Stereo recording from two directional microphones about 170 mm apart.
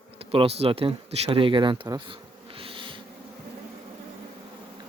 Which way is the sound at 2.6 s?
30° right (ahead or behind).